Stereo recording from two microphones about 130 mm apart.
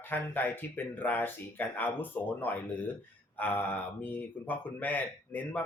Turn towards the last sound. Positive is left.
turn(degrees=15)  # may be behind; listen again after turning